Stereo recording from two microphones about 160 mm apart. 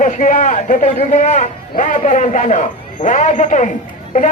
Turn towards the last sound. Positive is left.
turn(degrees=55)  # may be behind; listen again after turning